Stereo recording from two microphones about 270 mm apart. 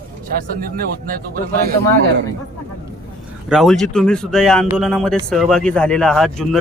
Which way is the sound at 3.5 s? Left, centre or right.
Centre.